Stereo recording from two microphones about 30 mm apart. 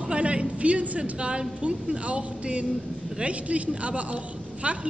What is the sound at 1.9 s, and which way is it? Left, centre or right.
A woman's voice, right.